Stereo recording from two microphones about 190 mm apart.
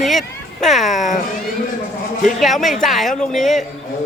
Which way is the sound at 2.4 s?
Centre (ahead or behind).